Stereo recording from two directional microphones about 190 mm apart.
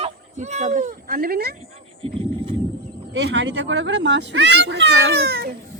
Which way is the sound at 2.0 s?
30° right (ahead or behind).